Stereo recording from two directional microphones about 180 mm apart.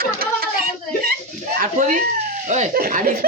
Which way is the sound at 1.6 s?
45° right (ahead or behind).